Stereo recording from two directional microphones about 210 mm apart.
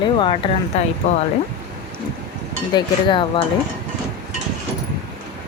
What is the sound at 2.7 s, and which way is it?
Speech, 25° left (ahead or behind).